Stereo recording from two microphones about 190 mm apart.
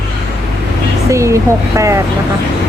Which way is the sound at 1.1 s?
15° right (ahead or behind).